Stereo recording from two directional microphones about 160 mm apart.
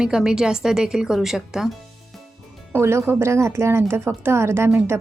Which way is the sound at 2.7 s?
15° right (ahead or behind).